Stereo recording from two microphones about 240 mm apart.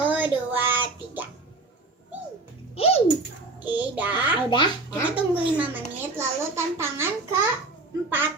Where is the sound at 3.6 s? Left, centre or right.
Centre.